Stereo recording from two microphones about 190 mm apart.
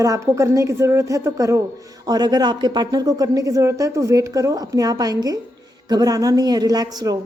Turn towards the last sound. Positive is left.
turn(degrees=-20)  # may be behind; listen again after turning